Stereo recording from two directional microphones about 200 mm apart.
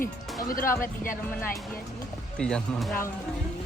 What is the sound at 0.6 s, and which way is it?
Speech, 15° left (ahead or behind).